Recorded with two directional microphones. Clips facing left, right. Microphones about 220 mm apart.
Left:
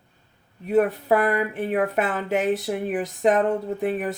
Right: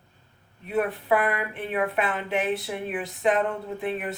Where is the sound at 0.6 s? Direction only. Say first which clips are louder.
Left 5 dB; 40° left (ahead or behind).